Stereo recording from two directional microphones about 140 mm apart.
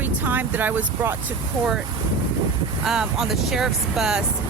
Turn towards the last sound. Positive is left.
turn(degrees=-5)  # may be behind; listen again after turning